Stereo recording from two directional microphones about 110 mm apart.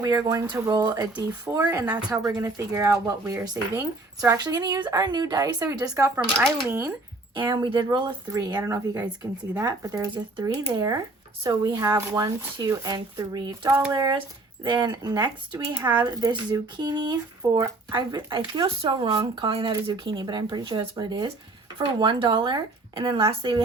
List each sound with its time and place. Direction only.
0.0 s speech: 35° right (ahead or behind)
1.5 s speech: 25° right (ahead or behind)
7.3 s speech: 40° right (ahead or behind)